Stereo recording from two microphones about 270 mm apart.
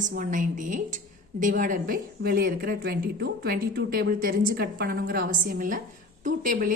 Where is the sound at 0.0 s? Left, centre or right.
Right.